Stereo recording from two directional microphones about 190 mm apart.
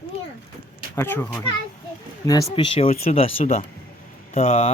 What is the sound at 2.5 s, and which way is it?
Speech, 30° left (ahead or behind).